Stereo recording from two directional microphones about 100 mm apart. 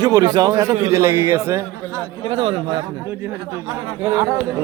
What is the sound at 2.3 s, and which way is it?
Speech, 65° right (ahead or behind).